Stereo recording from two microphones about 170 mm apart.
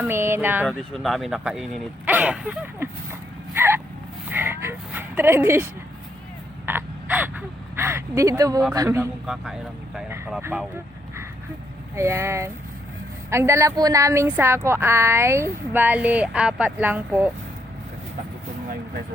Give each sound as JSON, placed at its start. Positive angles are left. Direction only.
{"t": 0.0, "sound": "speech", "side_deg": -15}
{"t": 0.7, "sound": "speech", "side_deg": 5}
{"t": 3.5, "sound": "a sound", "side_deg": -15}
{"t": 6.7, "sound": "a woman's voice", "side_deg": -10}
{"t": 9.2, "sound": "a woman's voice", "side_deg": -5}
{"t": 11.9, "sound": "a woman's voice", "side_deg": -15}